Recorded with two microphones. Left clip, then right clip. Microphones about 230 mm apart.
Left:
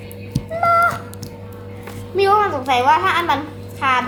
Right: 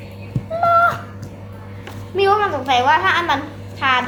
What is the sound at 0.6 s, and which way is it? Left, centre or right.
Music, centre.